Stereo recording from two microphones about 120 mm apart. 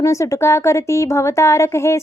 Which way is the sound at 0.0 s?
25° left (ahead or behind).